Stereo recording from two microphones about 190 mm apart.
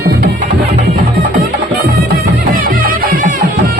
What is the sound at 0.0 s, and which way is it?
Music, 55° right (ahead or behind).